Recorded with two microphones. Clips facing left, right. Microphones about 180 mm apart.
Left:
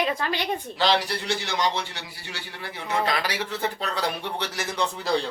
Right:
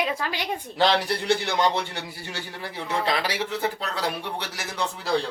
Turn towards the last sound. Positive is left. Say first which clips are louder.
# left 2 dB
turn(degrees=-5)  # may be behind; listen again after turning